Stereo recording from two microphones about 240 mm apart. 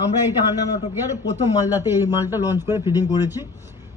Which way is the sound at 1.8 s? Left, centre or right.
Centre.